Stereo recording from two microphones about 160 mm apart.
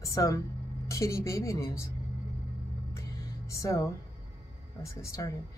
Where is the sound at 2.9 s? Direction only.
20° left (ahead or behind).